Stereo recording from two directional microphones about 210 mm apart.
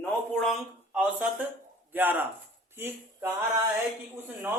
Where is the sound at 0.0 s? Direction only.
5° left (ahead or behind).